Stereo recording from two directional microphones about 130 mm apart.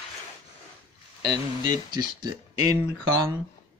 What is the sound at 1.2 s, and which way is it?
Speech, 30° right (ahead or behind).